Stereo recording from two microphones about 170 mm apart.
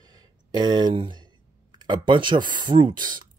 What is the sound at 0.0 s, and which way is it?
Speech, 25° right (ahead or behind).